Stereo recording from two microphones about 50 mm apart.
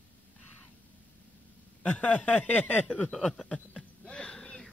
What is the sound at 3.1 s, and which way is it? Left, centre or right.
Speech, centre.